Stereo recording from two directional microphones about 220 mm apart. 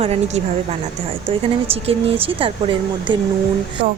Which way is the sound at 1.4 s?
25° right (ahead or behind).